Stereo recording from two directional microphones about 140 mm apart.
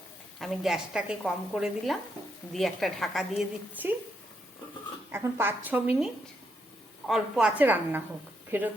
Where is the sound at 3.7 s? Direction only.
10° right (ahead or behind).